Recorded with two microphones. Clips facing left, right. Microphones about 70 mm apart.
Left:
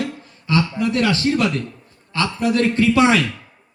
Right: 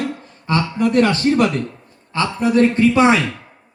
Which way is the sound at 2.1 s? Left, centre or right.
Right.